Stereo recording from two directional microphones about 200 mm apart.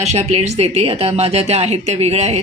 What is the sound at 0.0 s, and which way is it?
A woman's voice, 35° right (ahead or behind).